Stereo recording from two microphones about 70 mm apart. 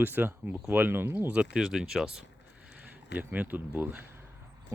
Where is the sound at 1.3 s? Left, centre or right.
Centre.